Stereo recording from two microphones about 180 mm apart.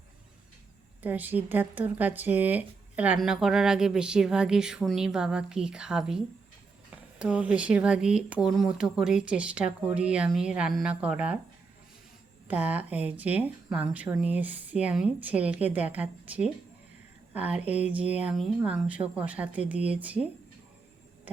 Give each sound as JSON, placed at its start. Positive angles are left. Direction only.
{"t": 1.0, "sound": "speech", "side_deg": -10}
{"t": 12.5, "sound": "speech", "side_deg": -10}